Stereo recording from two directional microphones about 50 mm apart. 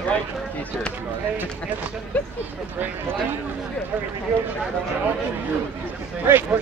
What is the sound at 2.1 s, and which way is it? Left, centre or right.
Speech, left.